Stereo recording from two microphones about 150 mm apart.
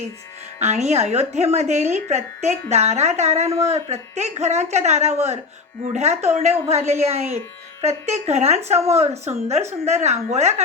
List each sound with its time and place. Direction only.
0.6 s speech: 50° right (ahead or behind)